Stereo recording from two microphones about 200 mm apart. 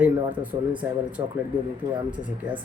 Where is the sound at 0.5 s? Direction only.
20° right (ahead or behind).